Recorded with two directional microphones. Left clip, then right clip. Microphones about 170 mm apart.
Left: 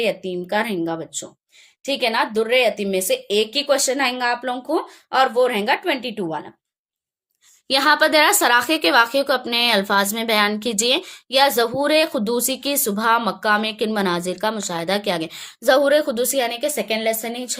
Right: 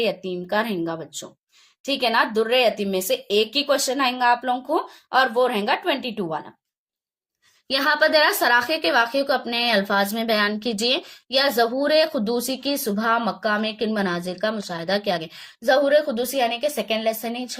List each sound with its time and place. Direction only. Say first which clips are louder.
0.0 s speech: left 2 dB; 20° left (ahead or behind)
7.7 s a woman's voice: left 3 dB; 40° left (ahead or behind)